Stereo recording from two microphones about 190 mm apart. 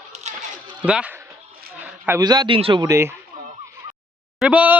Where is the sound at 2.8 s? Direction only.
15° right (ahead or behind).